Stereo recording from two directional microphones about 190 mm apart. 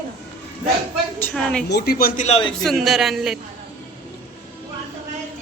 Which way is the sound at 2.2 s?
30° left (ahead or behind).